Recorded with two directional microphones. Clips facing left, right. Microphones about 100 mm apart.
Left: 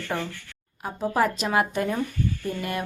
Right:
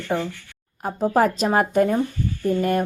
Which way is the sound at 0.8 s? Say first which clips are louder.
Right 5 dB; 40° right (ahead or behind).